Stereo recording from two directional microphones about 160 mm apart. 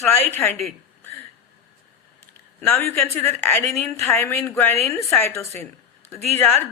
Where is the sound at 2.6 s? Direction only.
15° left (ahead or behind).